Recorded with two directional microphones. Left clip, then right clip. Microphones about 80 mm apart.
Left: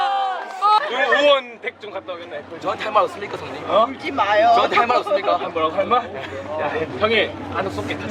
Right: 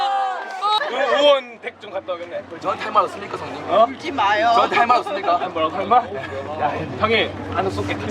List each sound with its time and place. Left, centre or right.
0.3 s a sound: right
2.6 s speech: centre
3.7 s speech: centre
4.5 s a man's voice: centre